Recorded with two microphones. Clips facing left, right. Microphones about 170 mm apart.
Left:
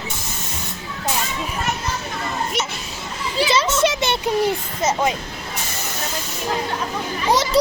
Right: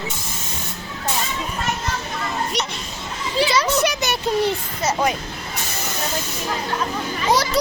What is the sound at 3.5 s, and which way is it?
Children playing, 25° left (ahead or behind).